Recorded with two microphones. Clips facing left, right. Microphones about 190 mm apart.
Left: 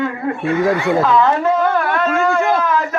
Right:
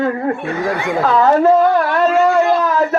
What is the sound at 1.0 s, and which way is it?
Speech, 40° right (ahead or behind).